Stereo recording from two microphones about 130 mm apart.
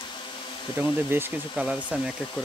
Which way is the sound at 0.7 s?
15° right (ahead or behind).